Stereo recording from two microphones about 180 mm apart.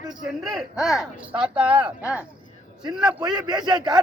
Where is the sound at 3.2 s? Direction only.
25° right (ahead or behind).